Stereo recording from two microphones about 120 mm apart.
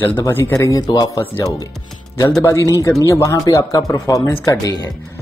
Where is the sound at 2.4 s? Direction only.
25° left (ahead or behind).